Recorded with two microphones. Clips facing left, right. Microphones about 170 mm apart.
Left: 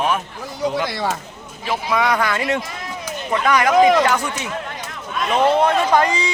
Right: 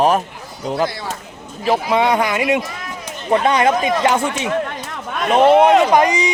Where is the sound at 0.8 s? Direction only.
90° left.